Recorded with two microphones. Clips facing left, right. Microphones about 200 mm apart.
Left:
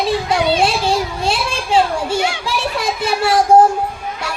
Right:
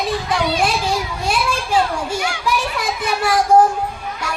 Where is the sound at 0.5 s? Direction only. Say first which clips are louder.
Left 3 dB; 30° left (ahead or behind).